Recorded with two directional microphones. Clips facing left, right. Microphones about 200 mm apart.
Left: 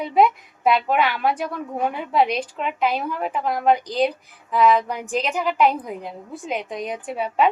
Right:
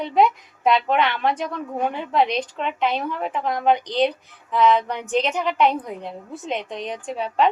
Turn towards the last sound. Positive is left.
turn(degrees=10)  # may be behind; listen again after turning